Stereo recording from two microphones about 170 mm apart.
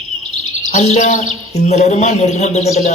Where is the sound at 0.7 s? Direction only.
40° left (ahead or behind).